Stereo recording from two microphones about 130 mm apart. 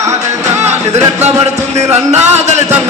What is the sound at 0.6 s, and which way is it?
Music, 55° right (ahead or behind).